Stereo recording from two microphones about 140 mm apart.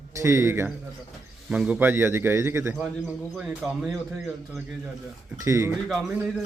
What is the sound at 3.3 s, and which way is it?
Speech, 5° right (ahead or behind).